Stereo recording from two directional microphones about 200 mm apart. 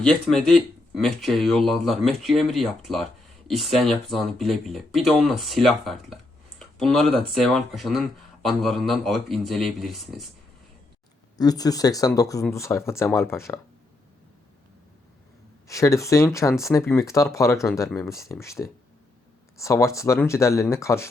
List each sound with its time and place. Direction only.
0.0 s speech: 5° left (ahead or behind)
6.6 s a sound: centre (ahead or behind)
7.3 s speech: centre (ahead or behind)
11.3 s speech: 20° left (ahead or behind)
15.6 s speech: 15° left (ahead or behind)